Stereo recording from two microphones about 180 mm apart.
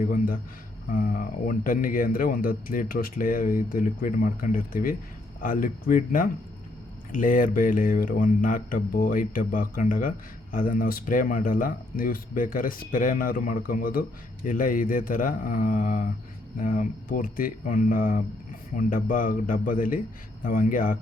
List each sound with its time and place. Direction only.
0.9 s a man's voice: 50° left (ahead or behind)